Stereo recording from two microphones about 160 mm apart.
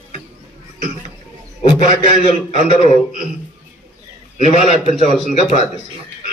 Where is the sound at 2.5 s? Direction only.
40° left (ahead or behind).